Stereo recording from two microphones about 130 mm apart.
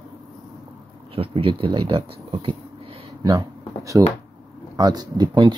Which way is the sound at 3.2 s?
30° right (ahead or behind).